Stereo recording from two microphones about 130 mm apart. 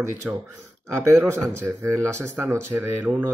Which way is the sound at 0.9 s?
20° right (ahead or behind).